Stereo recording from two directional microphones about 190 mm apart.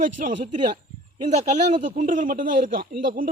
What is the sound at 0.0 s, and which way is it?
A woman's voice, 45° right (ahead or behind).